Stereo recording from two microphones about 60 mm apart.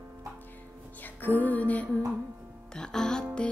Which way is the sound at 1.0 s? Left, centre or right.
Left.